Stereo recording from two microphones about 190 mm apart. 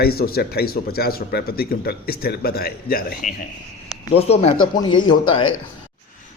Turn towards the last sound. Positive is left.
turn(degrees=25)  # may be behind; listen again after turning